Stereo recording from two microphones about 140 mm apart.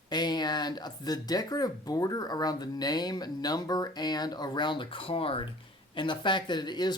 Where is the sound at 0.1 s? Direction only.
30° left (ahead or behind).